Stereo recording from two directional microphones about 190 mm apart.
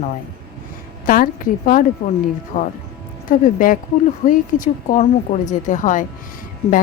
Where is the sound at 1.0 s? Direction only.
45° left (ahead or behind).